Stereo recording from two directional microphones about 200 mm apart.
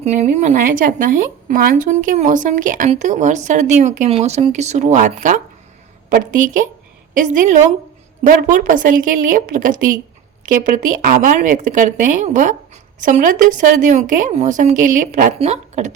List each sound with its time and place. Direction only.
0.0 s a woman's voice: 35° right (ahead or behind)